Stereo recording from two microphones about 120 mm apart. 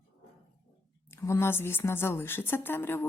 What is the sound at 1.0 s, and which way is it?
Speech, 20° left (ahead or behind).